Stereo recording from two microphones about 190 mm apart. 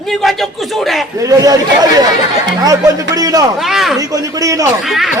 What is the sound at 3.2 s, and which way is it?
Speech, 20° right (ahead or behind).